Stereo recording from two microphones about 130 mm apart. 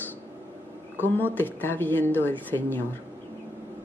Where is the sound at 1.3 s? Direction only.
15° left (ahead or behind).